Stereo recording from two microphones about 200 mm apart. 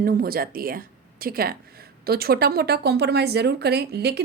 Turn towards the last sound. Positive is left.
turn(degrees=-55)  # may be behind; listen again after turning